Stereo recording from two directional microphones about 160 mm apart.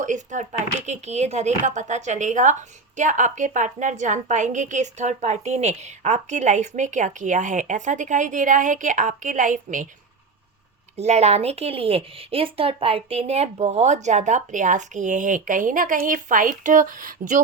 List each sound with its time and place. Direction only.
0.0 s speech: 50° right (ahead or behind)
10.9 s speech: 45° right (ahead or behind); by 17.4 s 60° right (ahead or behind)